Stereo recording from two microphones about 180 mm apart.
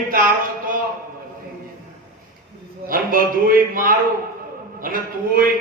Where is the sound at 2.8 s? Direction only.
50° right (ahead or behind).